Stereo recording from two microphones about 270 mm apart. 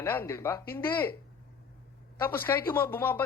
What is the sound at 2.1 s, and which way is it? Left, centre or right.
Speech, centre.